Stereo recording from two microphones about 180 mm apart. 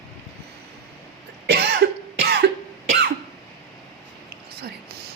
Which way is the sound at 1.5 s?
65° right (ahead or behind).